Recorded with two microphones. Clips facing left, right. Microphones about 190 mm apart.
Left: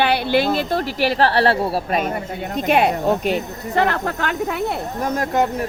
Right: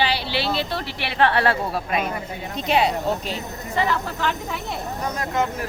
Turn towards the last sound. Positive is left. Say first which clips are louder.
# left 5 dB
turn(degrees=50)  # may be behind; listen again after turning